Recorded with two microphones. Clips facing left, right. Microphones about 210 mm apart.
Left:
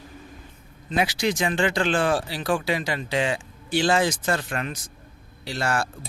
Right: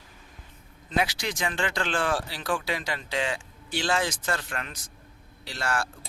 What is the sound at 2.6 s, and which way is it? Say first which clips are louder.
A man's voice: left 5 dB; 5° left (ahead or behind).